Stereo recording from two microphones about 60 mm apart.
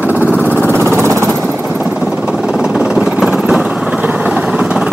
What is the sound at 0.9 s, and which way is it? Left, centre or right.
Vehicle, right.